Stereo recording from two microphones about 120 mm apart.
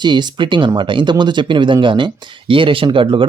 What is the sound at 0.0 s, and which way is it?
Speech, 40° right (ahead or behind).